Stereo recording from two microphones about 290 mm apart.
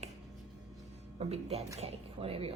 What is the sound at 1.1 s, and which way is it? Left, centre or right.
Speech, right.